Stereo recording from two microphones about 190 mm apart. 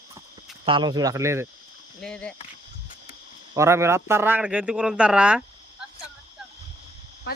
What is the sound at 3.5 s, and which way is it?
A man's voice, 15° right (ahead or behind).